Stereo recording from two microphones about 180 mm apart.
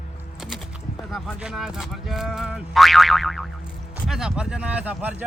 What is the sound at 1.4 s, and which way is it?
Speech, 5° right (ahead or behind).